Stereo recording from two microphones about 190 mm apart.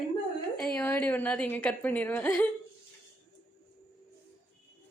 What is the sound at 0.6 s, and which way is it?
A woman's voice, 5° left (ahead or behind).